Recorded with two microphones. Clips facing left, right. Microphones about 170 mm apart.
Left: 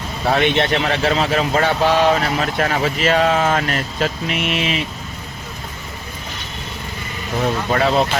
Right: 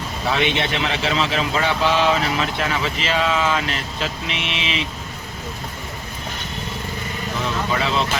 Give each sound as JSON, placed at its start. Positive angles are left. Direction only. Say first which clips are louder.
{"t": 0.3, "sound": "a man's voice", "louder": "left 5 dB", "side_deg": 50}
{"t": 7.4, "sound": "a man's voice", "louder": "left 6 dB", "side_deg": 50}